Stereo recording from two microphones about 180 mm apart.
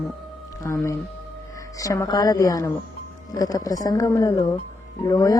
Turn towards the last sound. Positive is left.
turn(degrees=20)  # may be behind; listen again after turning